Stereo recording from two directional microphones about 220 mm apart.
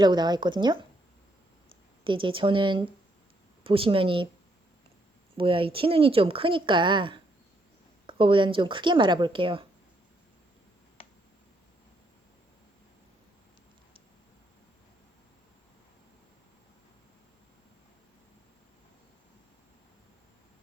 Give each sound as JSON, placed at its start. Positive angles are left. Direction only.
{"t": 0.0, "sound": "speech", "side_deg": -20}
{"t": 2.0, "sound": "speech", "side_deg": -20}
{"t": 5.4, "sound": "speech", "side_deg": -25}
{"t": 11.0, "sound": "a sound", "side_deg": 25}